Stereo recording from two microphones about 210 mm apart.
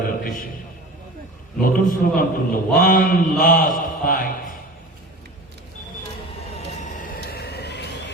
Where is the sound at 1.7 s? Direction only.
40° left (ahead or behind).